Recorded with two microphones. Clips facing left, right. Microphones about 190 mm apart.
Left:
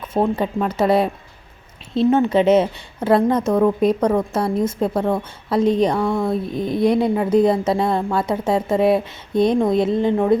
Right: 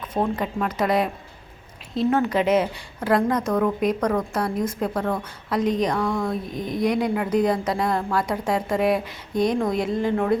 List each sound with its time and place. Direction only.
0.1 s a woman's voice: 25° left (ahead or behind)